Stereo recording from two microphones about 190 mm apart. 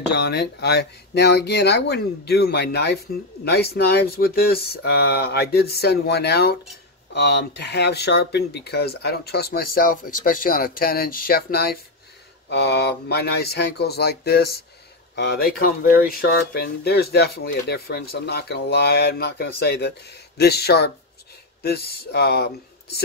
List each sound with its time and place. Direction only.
0.1 s speech: 60° left (ahead or behind)